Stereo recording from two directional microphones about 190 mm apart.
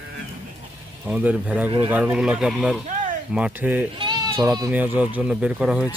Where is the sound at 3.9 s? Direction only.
25° right (ahead or behind).